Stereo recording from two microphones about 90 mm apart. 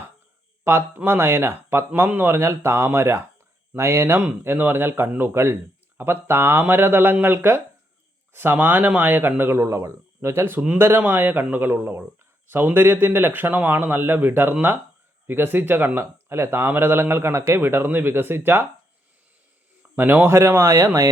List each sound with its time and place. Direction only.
0.6 s speech: 25° right (ahead or behind)
20.0 s speech: 25° right (ahead or behind)